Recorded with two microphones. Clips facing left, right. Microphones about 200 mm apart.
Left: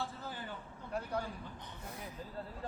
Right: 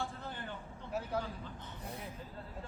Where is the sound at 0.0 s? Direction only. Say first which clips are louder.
Right 1 dB; 5° left (ahead or behind).